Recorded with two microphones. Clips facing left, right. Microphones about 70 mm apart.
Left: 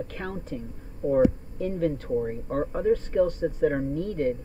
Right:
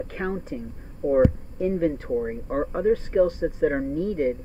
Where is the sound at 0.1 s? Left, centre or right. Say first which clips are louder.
Right 5 dB; right.